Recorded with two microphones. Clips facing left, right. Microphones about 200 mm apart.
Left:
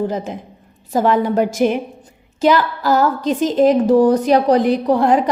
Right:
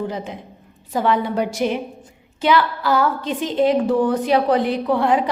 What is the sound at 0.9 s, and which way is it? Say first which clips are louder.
A woman's voice: left 4 dB; 45° left (ahead or behind).